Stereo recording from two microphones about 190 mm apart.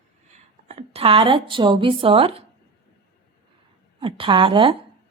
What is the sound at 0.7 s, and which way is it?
Speech, 35° right (ahead or behind).